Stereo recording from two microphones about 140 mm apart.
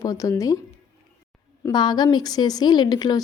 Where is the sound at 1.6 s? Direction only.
30° left (ahead or behind).